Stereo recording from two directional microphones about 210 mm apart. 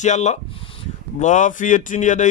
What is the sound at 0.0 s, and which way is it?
Speech, 35° left (ahead or behind).